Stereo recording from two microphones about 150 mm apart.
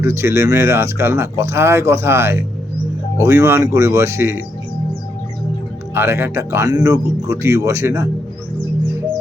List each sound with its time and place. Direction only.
0.0 s speech: 20° right (ahead or behind)
5.9 s speech: 15° right (ahead or behind)